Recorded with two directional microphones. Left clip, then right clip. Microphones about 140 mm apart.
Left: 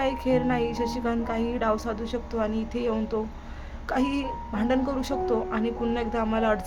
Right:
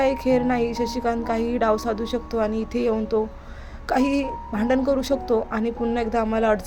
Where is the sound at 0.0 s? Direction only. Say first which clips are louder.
Right 5 dB; 25° right (ahead or behind).